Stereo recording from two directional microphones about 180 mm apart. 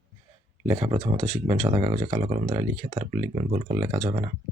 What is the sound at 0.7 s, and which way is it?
Speech, 25° right (ahead or behind).